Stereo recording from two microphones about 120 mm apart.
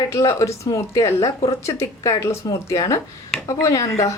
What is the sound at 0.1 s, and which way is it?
A woman's voice, 25° left (ahead or behind).